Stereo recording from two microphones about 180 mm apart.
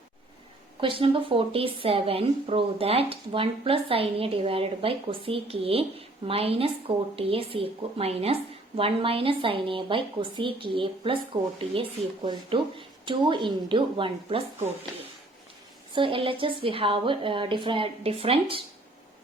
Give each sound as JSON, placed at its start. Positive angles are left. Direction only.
{"t": 0.8, "sound": "a woman's voice", "side_deg": -30}
{"t": 16.0, "sound": "a woman's voice", "side_deg": -30}